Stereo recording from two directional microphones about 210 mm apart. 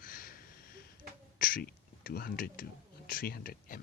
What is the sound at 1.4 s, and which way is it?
Speech, 45° left (ahead or behind).